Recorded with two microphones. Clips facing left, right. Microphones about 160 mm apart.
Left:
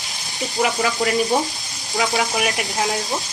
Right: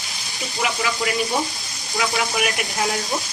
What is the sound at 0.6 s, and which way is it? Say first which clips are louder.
Speech: left 4 dB; 40° left (ahead or behind).